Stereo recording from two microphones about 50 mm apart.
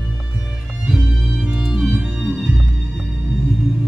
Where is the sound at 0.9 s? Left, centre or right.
Right.